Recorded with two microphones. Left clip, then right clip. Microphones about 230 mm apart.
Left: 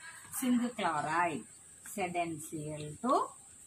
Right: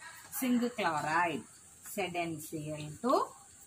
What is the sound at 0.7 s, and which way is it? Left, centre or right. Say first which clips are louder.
A woman's voice: right 2 dB; centre.